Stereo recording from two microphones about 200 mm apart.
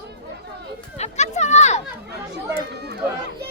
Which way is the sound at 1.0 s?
35° left (ahead or behind).